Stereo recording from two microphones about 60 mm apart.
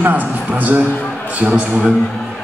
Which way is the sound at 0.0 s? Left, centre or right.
Right.